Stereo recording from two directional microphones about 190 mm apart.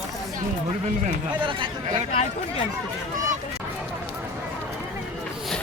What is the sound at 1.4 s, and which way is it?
Speech, 25° right (ahead or behind).